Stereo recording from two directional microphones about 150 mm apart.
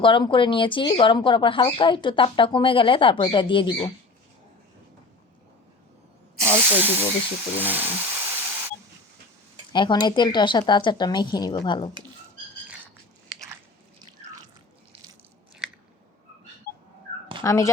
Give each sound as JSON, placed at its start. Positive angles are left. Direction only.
{"t": 0.0, "sound": "speech", "side_deg": 35}
{"t": 6.6, "sound": "speech", "side_deg": -10}
{"t": 7.5, "sound": "a sound", "side_deg": -10}
{"t": 9.7, "sound": "speech", "side_deg": 30}
{"t": 17.4, "sound": "speech", "side_deg": 20}